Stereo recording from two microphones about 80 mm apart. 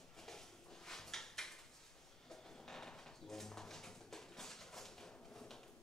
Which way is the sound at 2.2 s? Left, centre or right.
Centre.